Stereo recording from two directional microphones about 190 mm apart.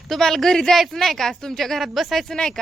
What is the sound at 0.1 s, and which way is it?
Speech, centre (ahead or behind).